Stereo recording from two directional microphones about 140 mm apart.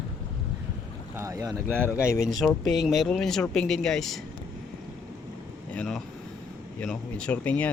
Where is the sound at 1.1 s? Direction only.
25° right (ahead or behind).